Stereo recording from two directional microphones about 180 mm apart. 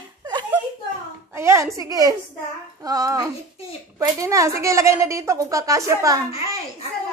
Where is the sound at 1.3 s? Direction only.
15° right (ahead or behind).